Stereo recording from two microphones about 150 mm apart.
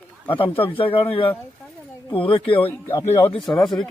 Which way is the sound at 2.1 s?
35° left (ahead or behind).